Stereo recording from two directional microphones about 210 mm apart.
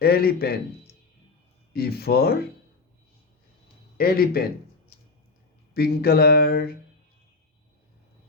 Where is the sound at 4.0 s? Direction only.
45° left (ahead or behind).